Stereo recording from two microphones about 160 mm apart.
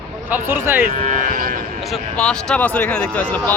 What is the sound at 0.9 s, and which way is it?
Speech, 50° right (ahead or behind).